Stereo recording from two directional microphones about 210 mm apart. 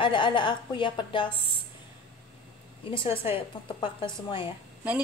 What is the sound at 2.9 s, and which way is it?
A woman's voice, 25° left (ahead or behind).